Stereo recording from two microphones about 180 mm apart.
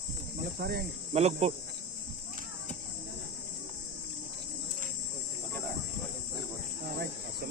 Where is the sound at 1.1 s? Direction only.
35° right (ahead or behind).